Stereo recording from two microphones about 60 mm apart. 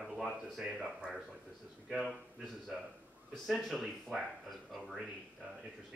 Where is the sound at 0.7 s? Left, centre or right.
Centre.